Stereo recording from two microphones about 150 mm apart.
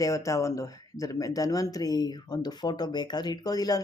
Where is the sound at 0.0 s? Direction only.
20° left (ahead or behind).